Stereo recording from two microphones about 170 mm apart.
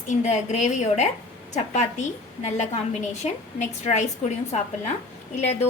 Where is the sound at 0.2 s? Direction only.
45° left (ahead or behind).